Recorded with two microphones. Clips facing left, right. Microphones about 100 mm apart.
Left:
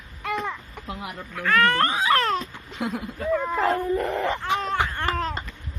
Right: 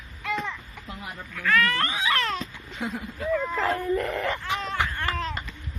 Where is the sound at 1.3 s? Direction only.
35° left (ahead or behind).